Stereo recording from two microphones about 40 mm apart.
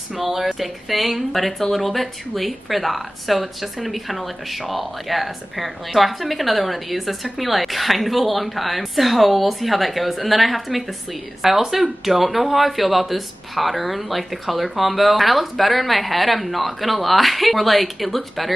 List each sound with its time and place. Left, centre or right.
0.2 s speech: centre